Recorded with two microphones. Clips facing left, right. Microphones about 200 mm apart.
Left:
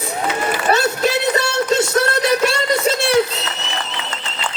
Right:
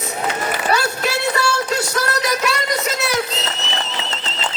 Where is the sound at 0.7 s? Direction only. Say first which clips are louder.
Left 5 dB; 20° left (ahead or behind).